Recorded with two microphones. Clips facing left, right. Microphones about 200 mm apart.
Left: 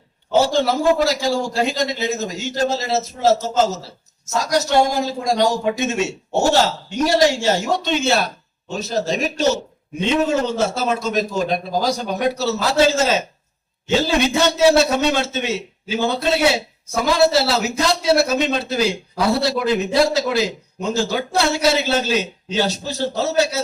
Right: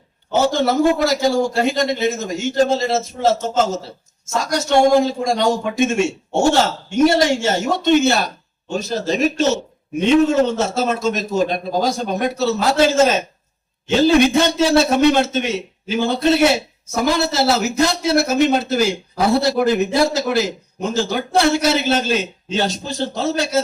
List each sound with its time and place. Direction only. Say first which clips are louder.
0.5 s a man's voice: right 1 dB; 55° right (ahead or behind)
10.0 s a man's voice: right 5 dB; 55° right (ahead or behind)